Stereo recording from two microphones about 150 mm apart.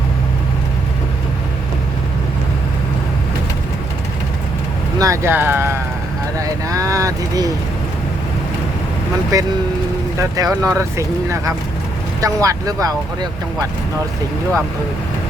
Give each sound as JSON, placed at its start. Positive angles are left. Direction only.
{"t": 4.9, "sound": "speech", "side_deg": -20}
{"t": 6.4, "sound": "a sound", "side_deg": -20}
{"t": 9.3, "sound": "speech", "side_deg": -25}